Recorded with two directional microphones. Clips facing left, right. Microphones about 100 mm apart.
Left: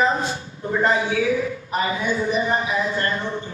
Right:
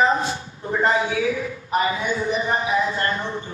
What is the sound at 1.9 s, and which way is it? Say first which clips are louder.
Speech: left 1 dB; 30° left (ahead or behind).